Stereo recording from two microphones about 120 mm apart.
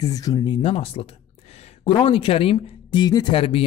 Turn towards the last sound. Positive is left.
turn(degrees=50)  # may be behind; listen again after turning